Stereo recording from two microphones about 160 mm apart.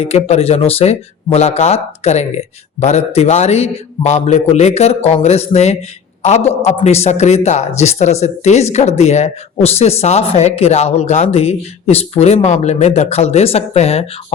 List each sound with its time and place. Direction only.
0.0 s a man's voice: 40° left (ahead or behind)